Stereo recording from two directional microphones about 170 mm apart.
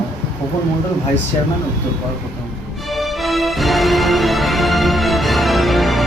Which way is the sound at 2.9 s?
Centre (ahead or behind).